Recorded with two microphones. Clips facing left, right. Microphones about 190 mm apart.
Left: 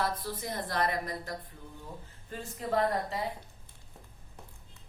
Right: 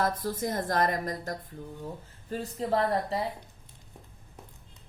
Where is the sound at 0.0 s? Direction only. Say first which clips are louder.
Right 5 dB; 45° right (ahead or behind).